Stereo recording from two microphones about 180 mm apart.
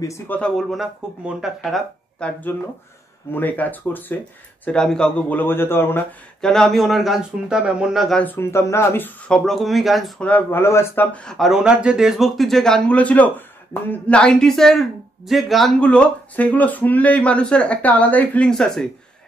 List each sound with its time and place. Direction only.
0.0 s speech: 15° left (ahead or behind)
0.4 s speech: centre (ahead or behind)
9.4 s speech: centre (ahead or behind)